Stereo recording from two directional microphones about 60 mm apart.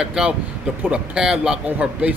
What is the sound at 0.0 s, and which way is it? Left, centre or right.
Speech, centre.